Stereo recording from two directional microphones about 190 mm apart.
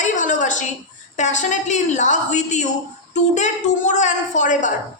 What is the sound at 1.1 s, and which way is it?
A man's voice, 40° left (ahead or behind).